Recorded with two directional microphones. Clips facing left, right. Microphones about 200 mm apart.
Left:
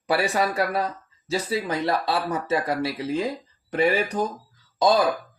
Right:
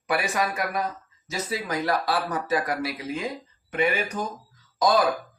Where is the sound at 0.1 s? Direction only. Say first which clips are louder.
Left 3 dB; 30° left (ahead or behind).